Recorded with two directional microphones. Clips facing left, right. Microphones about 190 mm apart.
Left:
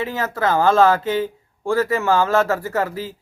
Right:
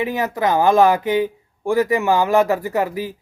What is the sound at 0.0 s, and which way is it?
Speech, 15° right (ahead or behind).